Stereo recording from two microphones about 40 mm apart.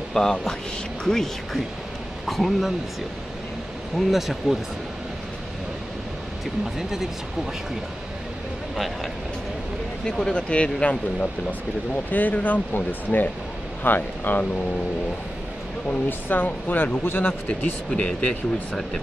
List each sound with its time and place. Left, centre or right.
0.1 s speech: centre
2.2 s speech: centre
4.1 s speech: centre
8.7 s speech: centre
10.0 s speech: centre
12.1 s speech: left
16.1 s speech: left
17.5 s speech: left